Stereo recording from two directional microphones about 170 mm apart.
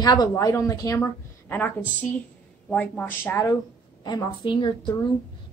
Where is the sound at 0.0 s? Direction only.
25° left (ahead or behind).